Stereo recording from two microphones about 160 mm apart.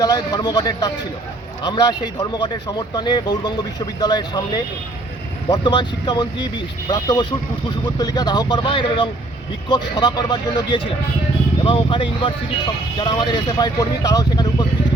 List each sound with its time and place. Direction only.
0.0 s speech: 25° left (ahead or behind)